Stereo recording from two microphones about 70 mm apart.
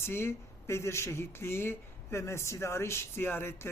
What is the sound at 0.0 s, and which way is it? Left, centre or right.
Speech, left.